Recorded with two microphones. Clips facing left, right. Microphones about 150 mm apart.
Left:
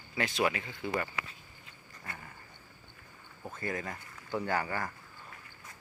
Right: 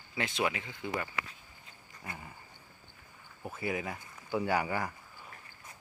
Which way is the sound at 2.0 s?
15° right (ahead or behind).